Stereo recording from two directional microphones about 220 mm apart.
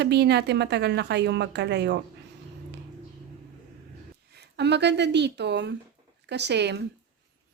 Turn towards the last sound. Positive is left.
turn(degrees=-50)  # may be behind; listen again after turning